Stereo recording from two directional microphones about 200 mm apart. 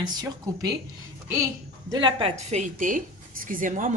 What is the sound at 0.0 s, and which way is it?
Speech, 20° right (ahead or behind).